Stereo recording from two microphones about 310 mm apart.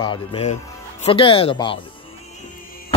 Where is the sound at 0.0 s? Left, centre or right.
Centre.